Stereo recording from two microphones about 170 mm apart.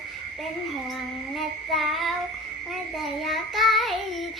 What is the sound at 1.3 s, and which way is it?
Child singing, centre (ahead or behind).